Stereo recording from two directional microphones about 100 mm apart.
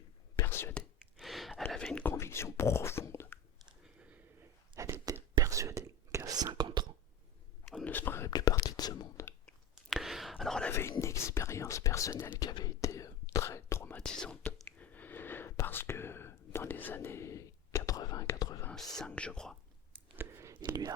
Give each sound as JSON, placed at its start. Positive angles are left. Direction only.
{"t": 0.4, "sound": "speech", "side_deg": 25}
{"t": 1.2, "sound": "a sound", "side_deg": 0}
{"t": 2.0, "sound": "beatboxing", "side_deg": 25}
{"t": 4.8, "sound": "whispering", "side_deg": -30}
{"t": 6.5, "sound": "whispering", "side_deg": -50}
{"t": 7.9, "sound": "whispering", "side_deg": 20}
{"t": 8.3, "sound": "whispering", "side_deg": 40}
{"t": 9.5, "sound": "whispering", "side_deg": 0}
{"t": 10.7, "sound": "whispering", "side_deg": 25}
{"t": 13.9, "sound": "whispering", "side_deg": 10}
{"t": 18.9, "sound": "whispering", "side_deg": 10}
{"t": 20.1, "sound": "a sound", "side_deg": -20}